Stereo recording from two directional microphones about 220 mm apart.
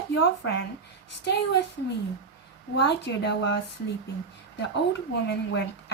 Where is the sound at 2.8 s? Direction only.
50° left (ahead or behind).